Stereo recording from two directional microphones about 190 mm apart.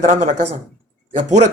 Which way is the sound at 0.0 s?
40° right (ahead or behind).